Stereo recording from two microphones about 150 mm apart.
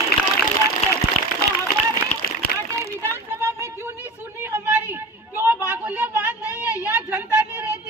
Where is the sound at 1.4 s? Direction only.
90° left.